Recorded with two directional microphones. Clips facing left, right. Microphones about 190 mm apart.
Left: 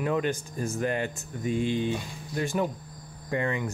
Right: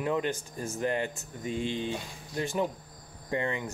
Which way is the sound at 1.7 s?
15° left (ahead or behind).